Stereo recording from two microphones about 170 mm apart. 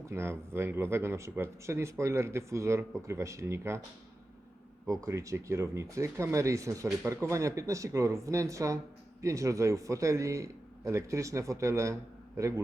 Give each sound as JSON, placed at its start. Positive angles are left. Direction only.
{"t": 0.0, "sound": "speech", "side_deg": -15}
{"t": 4.9, "sound": "a man's voice", "side_deg": -20}